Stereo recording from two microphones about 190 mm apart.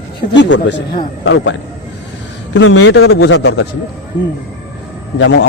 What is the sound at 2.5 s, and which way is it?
A man's voice, 85° left.